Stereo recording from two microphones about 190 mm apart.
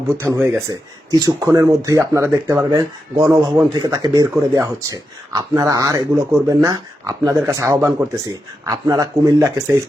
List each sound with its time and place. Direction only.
0.3 s speech: 15° right (ahead or behind)